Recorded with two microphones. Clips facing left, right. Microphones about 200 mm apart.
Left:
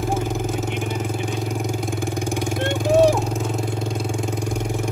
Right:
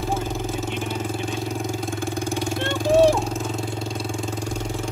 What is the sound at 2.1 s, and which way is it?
Vehicle, 15° left (ahead or behind).